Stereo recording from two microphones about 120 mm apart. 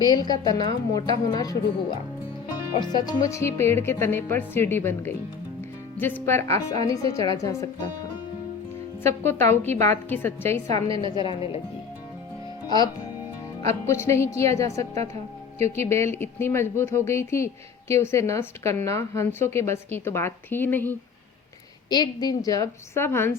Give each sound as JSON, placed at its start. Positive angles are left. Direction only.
{"t": 0.0, "sound": "a woman's voice", "side_deg": 35}
{"t": 9.0, "sound": "speech", "side_deg": 20}
{"t": 10.7, "sound": "a woman's voice", "side_deg": -55}
{"t": 11.3, "sound": "speech", "side_deg": 50}
{"t": 12.6, "sound": "speech", "side_deg": 35}
{"t": 13.6, "sound": "speech", "side_deg": 25}
{"t": 15.1, "sound": "speech", "side_deg": -65}
{"t": 15.9, "sound": "speech", "side_deg": 20}
{"t": 21.8, "sound": "speech", "side_deg": 35}